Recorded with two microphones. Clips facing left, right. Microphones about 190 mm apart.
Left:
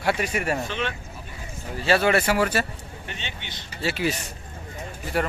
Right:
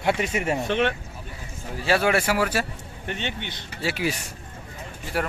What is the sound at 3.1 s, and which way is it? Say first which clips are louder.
Speech: right 8 dB; 55° right (ahead or behind).